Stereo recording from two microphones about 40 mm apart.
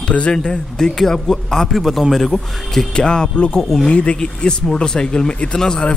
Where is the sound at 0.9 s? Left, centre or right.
Centre.